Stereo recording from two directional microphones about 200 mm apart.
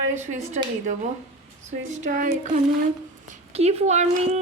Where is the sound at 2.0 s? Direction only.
40° right (ahead or behind).